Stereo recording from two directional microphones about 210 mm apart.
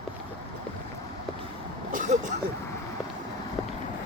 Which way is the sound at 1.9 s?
35° right (ahead or behind).